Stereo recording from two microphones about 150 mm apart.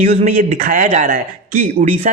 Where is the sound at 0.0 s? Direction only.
50° right (ahead or behind).